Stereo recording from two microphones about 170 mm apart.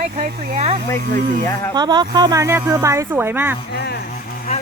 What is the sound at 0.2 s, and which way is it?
Speech, 40° right (ahead or behind).